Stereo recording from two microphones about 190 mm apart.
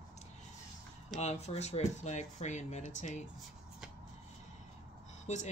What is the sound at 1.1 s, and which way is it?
Speech, 35° left (ahead or behind).